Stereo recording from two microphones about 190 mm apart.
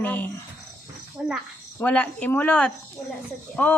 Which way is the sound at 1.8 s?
10° left (ahead or behind).